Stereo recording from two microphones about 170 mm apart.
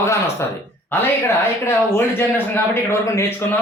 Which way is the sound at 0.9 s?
15° left (ahead or behind).